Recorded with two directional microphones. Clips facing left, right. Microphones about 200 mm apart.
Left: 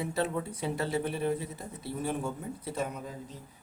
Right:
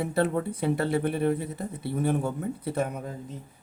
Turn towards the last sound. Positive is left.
turn(degrees=-55)  # may be behind; listen again after turning